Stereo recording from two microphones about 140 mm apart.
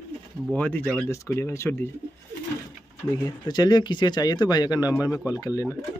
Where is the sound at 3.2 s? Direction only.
30° left (ahead or behind).